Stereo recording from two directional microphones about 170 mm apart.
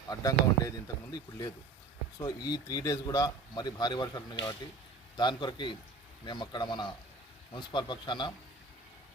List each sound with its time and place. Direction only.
0.1 s speech: 20° left (ahead or behind)